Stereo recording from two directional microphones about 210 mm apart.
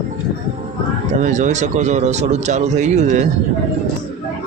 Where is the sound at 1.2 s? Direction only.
35° right (ahead or behind).